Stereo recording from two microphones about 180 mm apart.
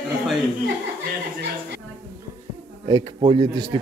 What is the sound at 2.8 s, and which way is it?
Speech, 25° right (ahead or behind).